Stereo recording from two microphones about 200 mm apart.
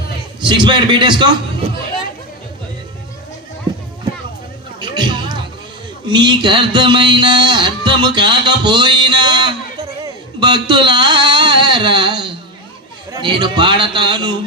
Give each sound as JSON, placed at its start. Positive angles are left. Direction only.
{"t": 0.4, "sound": "music", "side_deg": -25}
{"t": 4.8, "sound": "a sound", "side_deg": -25}
{"t": 6.1, "sound": "music", "side_deg": -25}
{"t": 10.0, "sound": "speech", "side_deg": -25}
{"t": 13.1, "sound": "music", "side_deg": -25}